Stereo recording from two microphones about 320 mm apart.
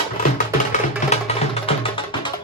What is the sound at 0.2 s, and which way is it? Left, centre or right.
Music, left.